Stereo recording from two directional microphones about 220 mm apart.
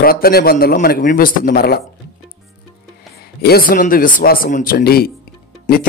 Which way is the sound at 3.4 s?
45° left (ahead or behind).